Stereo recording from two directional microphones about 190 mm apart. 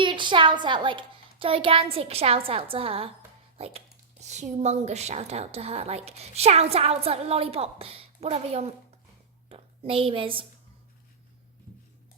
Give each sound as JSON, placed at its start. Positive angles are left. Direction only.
{"t": 0.0, "sound": "a child's voice", "side_deg": -25}